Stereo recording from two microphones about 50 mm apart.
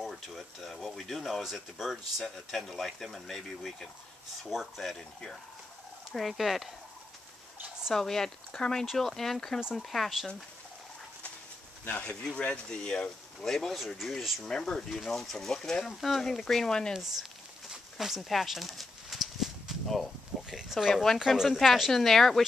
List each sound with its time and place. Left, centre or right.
0.0 s speech: centre
4.9 s speech: centre
6.1 s speech: centre
7.9 s speech: centre
11.9 s speech: left
13.5 s speech: centre
16.9 s a sound: centre
20.9 s speech: centre
21.3 s speech: centre